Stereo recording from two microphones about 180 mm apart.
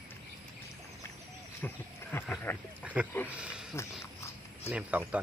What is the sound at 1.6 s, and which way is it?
Speech, 10° left (ahead or behind).